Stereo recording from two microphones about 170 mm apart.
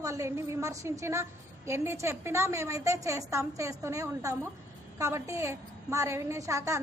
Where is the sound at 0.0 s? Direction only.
20° right (ahead or behind).